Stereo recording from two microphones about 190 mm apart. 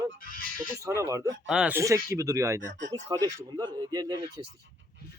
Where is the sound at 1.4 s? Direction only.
5° right (ahead or behind).